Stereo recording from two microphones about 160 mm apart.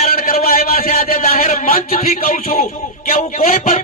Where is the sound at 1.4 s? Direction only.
45° left (ahead or behind).